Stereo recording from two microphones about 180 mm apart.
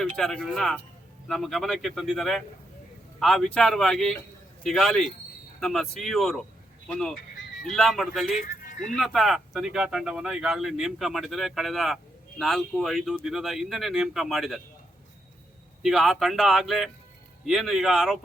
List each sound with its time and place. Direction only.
0.2 s speech: centre (ahead or behind)
8.4 s a sound: 45° left (ahead or behind)
9.0 s speech: centre (ahead or behind)
15.8 s speech: centre (ahead or behind)